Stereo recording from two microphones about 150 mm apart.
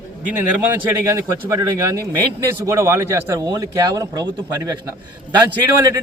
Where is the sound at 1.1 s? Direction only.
20° right (ahead or behind).